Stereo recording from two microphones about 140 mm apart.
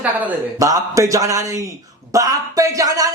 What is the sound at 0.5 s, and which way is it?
Speech, 25° right (ahead or behind).